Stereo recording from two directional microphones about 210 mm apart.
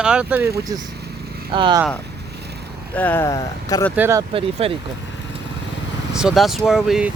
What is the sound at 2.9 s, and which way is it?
Speech, 10° left (ahead or behind).